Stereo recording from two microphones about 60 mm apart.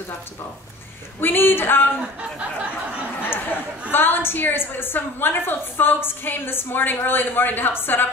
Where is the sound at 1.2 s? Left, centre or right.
Left.